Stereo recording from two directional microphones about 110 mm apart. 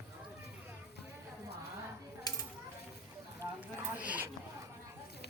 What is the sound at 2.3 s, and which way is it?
Coin, 35° left (ahead or behind).